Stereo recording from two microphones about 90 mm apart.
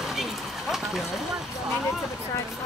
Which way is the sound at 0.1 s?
5° right (ahead or behind).